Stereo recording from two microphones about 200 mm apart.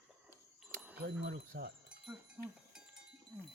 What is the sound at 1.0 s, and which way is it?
Speech, 50° right (ahead or behind).